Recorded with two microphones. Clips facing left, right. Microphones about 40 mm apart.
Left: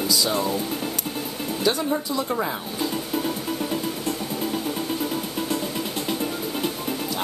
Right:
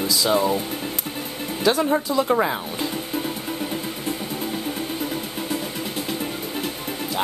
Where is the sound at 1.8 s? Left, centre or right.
Right.